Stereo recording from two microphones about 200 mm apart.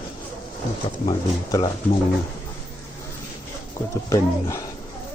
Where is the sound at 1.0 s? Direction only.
20° left (ahead or behind).